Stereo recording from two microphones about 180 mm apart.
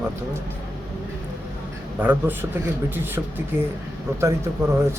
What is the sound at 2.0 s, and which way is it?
A man's voice, 10° right (ahead or behind).